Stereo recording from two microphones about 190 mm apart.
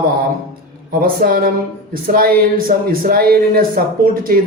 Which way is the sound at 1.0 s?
50° right (ahead or behind).